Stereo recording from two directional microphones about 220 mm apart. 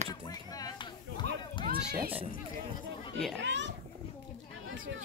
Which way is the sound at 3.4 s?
55° right (ahead or behind).